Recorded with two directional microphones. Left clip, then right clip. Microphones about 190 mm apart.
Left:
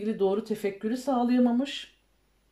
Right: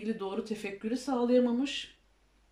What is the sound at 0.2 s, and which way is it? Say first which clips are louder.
Speech: left 9 dB; 40° left (ahead or behind).